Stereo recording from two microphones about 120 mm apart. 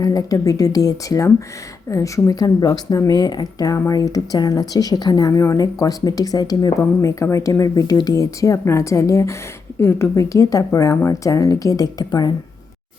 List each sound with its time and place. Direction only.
0.0 s a woman's voice: 30° left (ahead or behind)